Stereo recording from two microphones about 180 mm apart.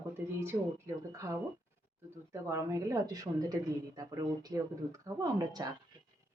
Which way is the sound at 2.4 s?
15° right (ahead or behind).